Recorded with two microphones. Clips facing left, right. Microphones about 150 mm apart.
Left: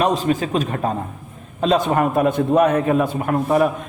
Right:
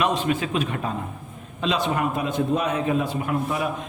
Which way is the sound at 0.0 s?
40° left (ahead or behind).